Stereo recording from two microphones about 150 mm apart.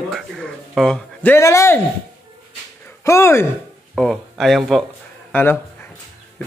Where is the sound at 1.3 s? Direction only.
20° left (ahead or behind).